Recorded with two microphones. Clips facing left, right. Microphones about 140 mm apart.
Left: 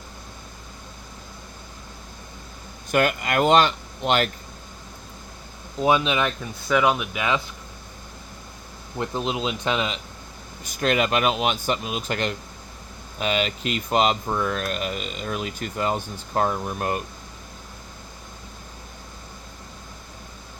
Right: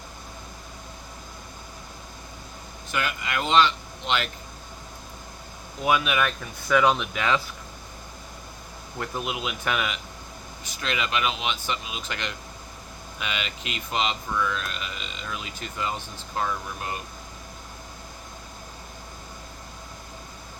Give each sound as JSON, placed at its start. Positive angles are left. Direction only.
{"t": 2.9, "sound": "speech", "side_deg": 50}
{"t": 5.8, "sound": "speech", "side_deg": 25}
{"t": 9.0, "sound": "speech", "side_deg": 25}
{"t": 10.6, "sound": "speech", "side_deg": 45}